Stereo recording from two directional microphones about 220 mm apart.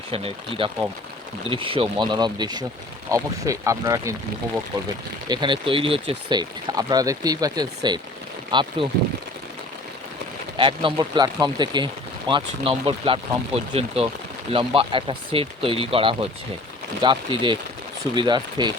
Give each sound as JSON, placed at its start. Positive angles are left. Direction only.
{"t": 0.1, "sound": "speech", "side_deg": -25}
{"t": 5.3, "sound": "speech", "side_deg": -20}
{"t": 10.6, "sound": "speech", "side_deg": -20}